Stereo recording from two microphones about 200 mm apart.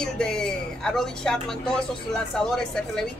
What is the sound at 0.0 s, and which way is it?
A woman's voice, 5° left (ahead or behind).